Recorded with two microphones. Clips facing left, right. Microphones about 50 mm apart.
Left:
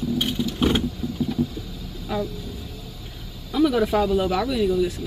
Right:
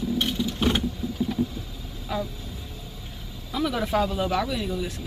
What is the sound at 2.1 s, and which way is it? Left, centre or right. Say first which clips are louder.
Speech: left 3 dB; centre.